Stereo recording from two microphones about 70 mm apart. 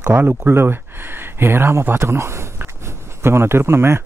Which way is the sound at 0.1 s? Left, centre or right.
Right.